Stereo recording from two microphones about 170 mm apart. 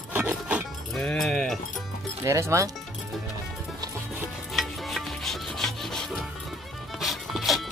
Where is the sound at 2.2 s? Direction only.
15° right (ahead or behind).